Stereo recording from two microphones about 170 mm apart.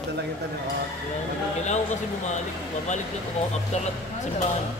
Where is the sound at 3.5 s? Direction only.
40° left (ahead or behind).